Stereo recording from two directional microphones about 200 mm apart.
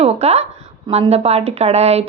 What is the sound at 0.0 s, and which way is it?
A woman's voice, 30° right (ahead or behind).